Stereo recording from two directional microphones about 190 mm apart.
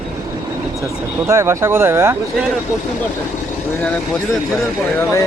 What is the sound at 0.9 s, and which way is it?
Speech, 10° right (ahead or behind).